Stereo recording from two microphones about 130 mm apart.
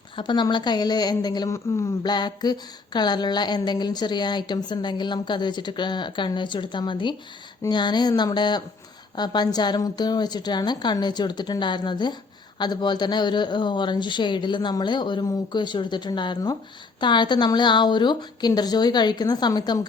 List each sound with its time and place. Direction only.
0.2 s a woman's voice: 35° left (ahead or behind)